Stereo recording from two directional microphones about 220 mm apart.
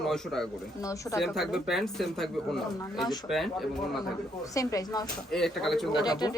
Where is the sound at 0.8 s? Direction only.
15° left (ahead or behind).